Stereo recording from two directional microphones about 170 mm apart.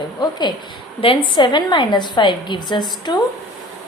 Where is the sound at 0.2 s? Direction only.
25° left (ahead or behind).